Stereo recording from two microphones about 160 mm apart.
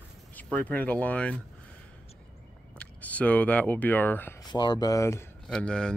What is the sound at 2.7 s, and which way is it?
Speech, 10° left (ahead or behind).